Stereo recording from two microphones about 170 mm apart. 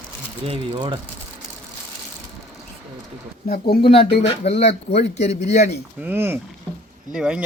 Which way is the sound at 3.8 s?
35° left (ahead or behind).